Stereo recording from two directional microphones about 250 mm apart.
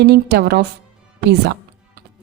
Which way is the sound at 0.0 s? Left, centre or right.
Right.